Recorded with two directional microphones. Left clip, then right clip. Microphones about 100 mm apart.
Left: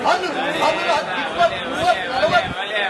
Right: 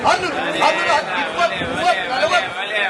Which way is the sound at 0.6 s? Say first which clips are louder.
Right 3 dB; 15° right (ahead or behind).